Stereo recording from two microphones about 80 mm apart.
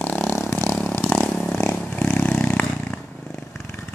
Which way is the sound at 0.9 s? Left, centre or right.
Left.